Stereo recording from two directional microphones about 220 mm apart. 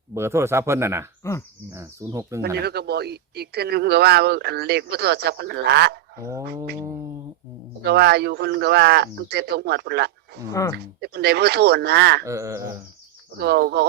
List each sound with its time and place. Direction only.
0.1 s speech: 10° right (ahead or behind)
1.2 s speech: 15° left (ahead or behind)
1.7 s speech: 15° right (ahead or behind)
2.6 s speech: 45° right (ahead or behind)
6.7 s speech: 15° right (ahead or behind)
7.8 s speech: 50° right (ahead or behind)
10.5 s speech: 15° left (ahead or behind)
11.0 s speech: 45° right (ahead or behind)
12.2 s speech: 15° right (ahead or behind)
13.4 s speech: 45° right (ahead or behind)